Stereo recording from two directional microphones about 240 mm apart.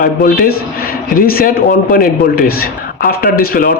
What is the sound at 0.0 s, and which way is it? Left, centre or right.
A man's voice, left.